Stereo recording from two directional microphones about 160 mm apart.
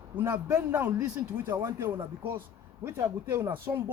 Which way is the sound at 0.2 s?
15° right (ahead or behind).